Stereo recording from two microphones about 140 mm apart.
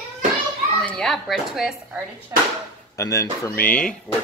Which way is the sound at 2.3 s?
20° right (ahead or behind).